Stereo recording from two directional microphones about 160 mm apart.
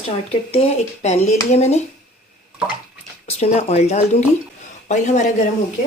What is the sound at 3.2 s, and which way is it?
Speech, 40° left (ahead or behind).